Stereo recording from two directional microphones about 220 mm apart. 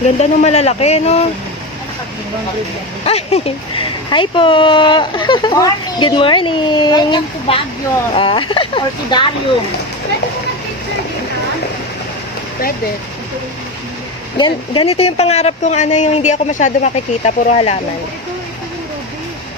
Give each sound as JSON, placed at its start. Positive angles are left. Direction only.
{"t": 0.2, "sound": "speech", "side_deg": 30}
{"t": 3.1, "sound": "speech", "side_deg": 25}
{"t": 14.3, "sound": "speech", "side_deg": 20}